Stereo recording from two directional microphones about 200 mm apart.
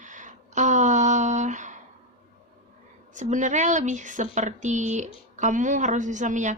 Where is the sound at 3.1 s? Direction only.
40° right (ahead or behind).